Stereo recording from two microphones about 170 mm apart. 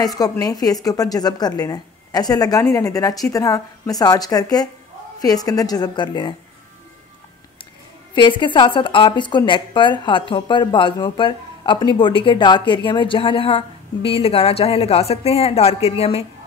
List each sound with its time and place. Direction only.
0.0 s a woman's voice: 20° left (ahead or behind)
8.1 s a woman's voice: 30° left (ahead or behind)